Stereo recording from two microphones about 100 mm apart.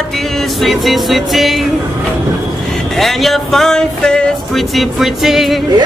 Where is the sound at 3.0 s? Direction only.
Centre (ahead or behind).